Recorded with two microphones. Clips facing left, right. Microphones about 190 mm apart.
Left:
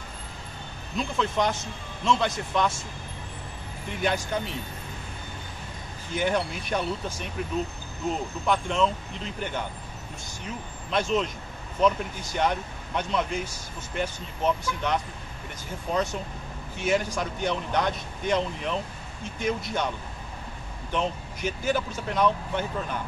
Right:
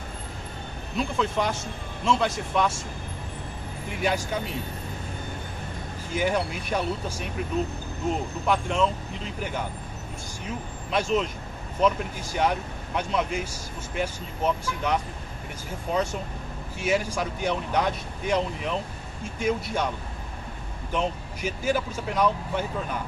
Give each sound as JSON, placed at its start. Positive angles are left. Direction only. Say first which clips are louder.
{"t": 0.9, "sound": "speech", "louder": "right 1 dB", "side_deg": -5}
{"t": 4.0, "sound": "speech", "louder": "even", "side_deg": -5}
{"t": 6.1, "sound": "speech", "louder": "right 1 dB", "side_deg": -5}
{"t": 8.5, "sound": "speech", "louder": "even", "side_deg": -5}
{"t": 10.9, "sound": "speech", "louder": "right 1 dB", "side_deg": -5}
{"t": 20.9, "sound": "speech", "louder": "right 1 dB", "side_deg": -5}